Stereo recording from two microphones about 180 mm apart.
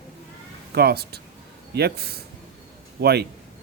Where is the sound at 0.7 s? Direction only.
60° right (ahead or behind).